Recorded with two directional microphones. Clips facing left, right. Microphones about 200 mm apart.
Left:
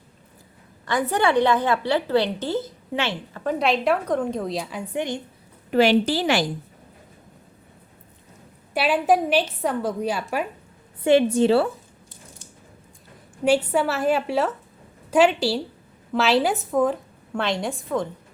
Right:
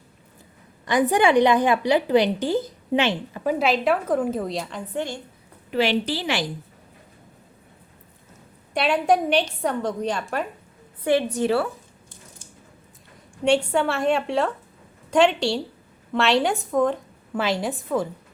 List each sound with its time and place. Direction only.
0.9 s a woman's voice: 15° right (ahead or behind)
3.5 s a woman's voice: centre (ahead or behind)
4.9 s a woman's voice: 20° left (ahead or behind)
5.7 s a woman's voice: 45° left (ahead or behind)
8.7 s a woman's voice: 5° left (ahead or behind)
11.0 s a woman's voice: 25° left (ahead or behind)
13.4 s a woman's voice: 5° left (ahead or behind)